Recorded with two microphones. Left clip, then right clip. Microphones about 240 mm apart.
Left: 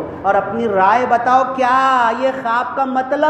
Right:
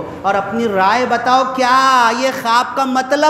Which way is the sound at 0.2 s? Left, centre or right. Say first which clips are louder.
Even; right.